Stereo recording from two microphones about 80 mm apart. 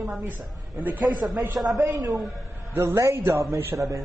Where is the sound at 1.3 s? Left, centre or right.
Right.